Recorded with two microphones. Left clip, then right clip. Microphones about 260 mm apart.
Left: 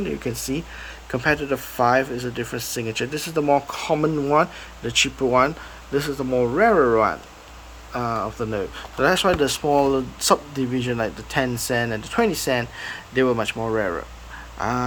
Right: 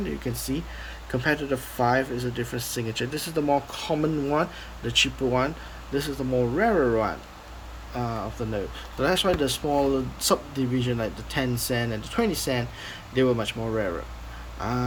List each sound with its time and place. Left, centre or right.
0.0 s speech: centre
8.1 s speech: left
8.5 s speech: centre